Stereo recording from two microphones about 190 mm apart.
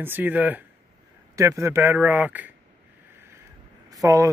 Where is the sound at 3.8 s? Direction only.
20° right (ahead or behind).